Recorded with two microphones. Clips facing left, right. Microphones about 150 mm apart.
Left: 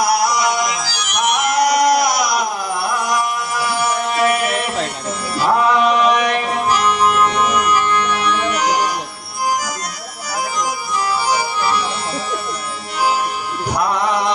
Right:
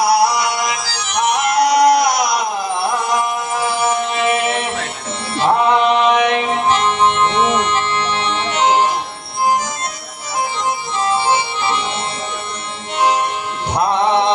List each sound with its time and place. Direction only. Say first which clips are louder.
0.0 s music: right 2 dB; 30° right (ahead or behind)
1.5 s a sound: right 3 dB; 30° right (ahead or behind)
2.9 s music: right 1 dB; 25° right (ahead or behind)
10.6 s music: right 1 dB; 25° right (ahead or behind)
13.7 s music: right 4 dB; 25° right (ahead or behind)